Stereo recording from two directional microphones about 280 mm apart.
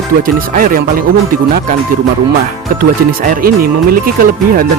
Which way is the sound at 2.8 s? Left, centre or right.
Right.